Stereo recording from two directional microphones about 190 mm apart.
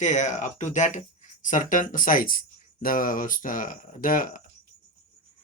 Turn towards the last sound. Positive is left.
turn(degrees=45)  # may be behind; listen again after turning